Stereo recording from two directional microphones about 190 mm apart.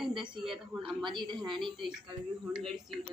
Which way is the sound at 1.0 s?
25° right (ahead or behind).